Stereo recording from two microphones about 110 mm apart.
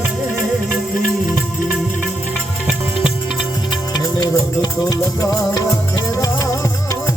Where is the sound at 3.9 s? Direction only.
35° left (ahead or behind).